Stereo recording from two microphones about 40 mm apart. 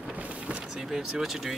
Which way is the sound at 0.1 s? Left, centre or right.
Right.